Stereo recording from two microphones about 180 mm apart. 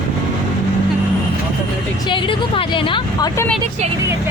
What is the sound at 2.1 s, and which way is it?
Speech, 30° left (ahead or behind).